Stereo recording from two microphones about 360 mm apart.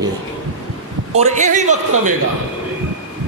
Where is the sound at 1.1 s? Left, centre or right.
Centre.